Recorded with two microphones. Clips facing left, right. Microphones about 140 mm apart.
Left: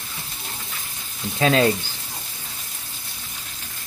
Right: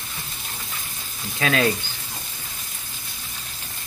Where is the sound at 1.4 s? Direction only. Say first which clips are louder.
Left 4 dB; 25° left (ahead or behind).